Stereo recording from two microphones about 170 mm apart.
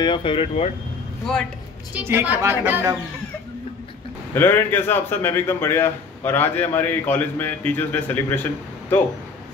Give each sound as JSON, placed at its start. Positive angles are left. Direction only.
{"t": 0.0, "sound": "speech", "side_deg": 30}
{"t": 2.0, "sound": "a woman's voice", "side_deg": -10}
{"t": 4.3, "sound": "a man's voice", "side_deg": 15}